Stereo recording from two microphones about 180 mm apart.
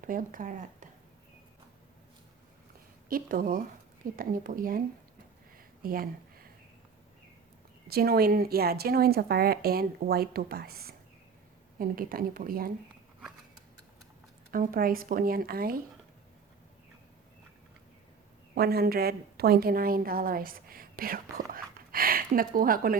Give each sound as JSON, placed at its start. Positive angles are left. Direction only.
{"t": 0.0, "sound": "speech", "side_deg": -50}
{"t": 3.1, "sound": "speech", "side_deg": -50}
{"t": 5.8, "sound": "speech", "side_deg": -55}
{"t": 7.9, "sound": "a woman's voice", "side_deg": -60}
{"t": 14.5, "sound": "speech", "side_deg": -50}
{"t": 18.5, "sound": "a woman's voice", "side_deg": -60}